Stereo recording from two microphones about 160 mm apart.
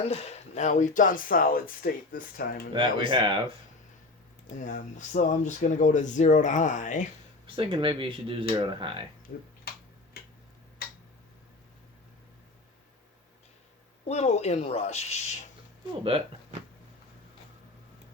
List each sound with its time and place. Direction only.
0.1 s speech: 40° left (ahead or behind); by 2.6 s 70° left (ahead or behind)
3.1 s speech: 30° right (ahead or behind)
4.5 s speech: 50° left (ahead or behind)
7.4 s speech: 30° right (ahead or behind)
10.2 s tick-tock: 80° left
14.1 s speech: 45° left (ahead or behind)
16.0 s speech: 35° right (ahead or behind)